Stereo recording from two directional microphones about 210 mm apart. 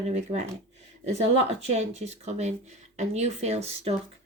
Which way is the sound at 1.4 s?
30° right (ahead or behind).